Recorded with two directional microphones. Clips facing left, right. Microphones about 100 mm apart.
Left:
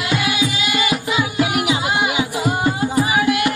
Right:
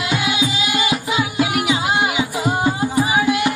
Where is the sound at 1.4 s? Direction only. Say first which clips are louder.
Even; 20° left (ahead or behind).